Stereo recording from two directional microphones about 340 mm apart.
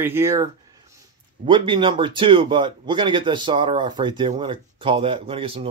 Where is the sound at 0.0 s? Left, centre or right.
Centre.